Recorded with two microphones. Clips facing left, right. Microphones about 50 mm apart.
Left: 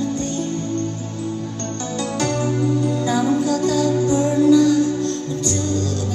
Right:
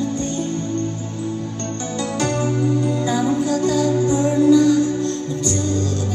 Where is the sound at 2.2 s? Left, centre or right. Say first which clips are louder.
Even; right.